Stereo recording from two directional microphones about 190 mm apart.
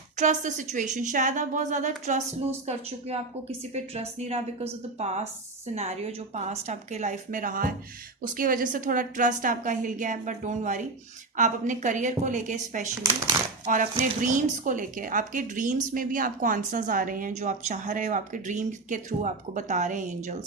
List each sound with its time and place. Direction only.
0.2 s a woman's voice: 40° right (ahead or behind)